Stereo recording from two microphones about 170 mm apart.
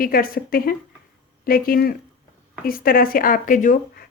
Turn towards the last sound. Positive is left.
turn(degrees=55)  # may be behind; listen again after turning